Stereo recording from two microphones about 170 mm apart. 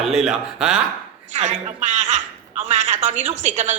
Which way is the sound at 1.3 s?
40° right (ahead or behind).